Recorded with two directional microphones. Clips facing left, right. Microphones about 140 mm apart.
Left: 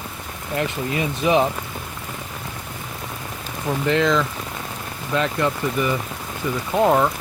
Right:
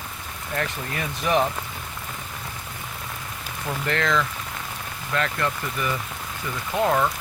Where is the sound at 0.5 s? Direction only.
15° left (ahead or behind).